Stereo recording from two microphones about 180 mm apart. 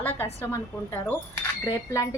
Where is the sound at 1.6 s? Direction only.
15° left (ahead or behind).